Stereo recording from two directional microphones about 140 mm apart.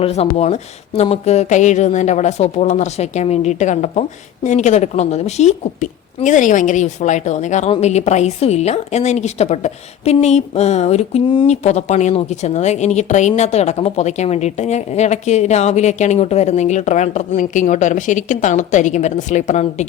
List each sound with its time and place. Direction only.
0.0 s a woman's voice: 50° left (ahead or behind)